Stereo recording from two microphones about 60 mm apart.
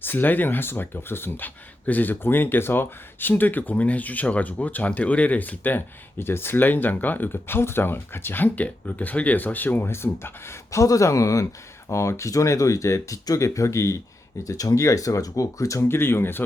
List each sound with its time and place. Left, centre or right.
0.0 s speech: left
14.4 s speech: left
15.9 s speech: left